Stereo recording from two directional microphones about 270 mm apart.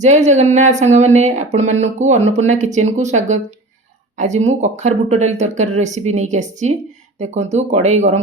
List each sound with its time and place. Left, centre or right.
0.0 s speech: right